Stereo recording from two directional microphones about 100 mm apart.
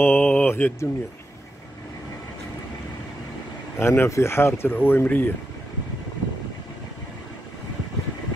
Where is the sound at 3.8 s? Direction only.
25° left (ahead or behind).